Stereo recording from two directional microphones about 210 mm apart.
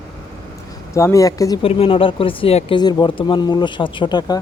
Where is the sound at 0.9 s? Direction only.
15° left (ahead or behind).